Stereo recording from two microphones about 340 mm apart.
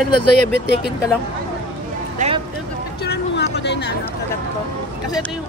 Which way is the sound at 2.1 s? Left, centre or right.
Centre.